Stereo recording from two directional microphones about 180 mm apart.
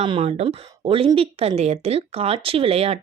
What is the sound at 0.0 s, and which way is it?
A woman's voice, 35° right (ahead or behind).